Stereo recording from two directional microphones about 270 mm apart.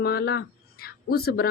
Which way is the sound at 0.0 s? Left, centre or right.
Left.